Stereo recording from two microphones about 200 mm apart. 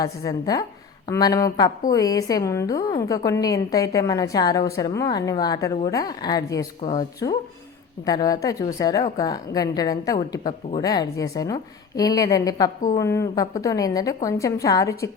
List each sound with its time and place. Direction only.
0.0 s a woman's voice: 20° left (ahead or behind)